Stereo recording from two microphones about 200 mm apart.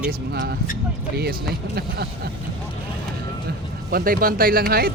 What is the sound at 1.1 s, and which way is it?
Speech, 50° right (ahead or behind).